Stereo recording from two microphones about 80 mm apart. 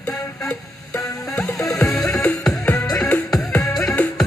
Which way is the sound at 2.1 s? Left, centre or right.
Centre.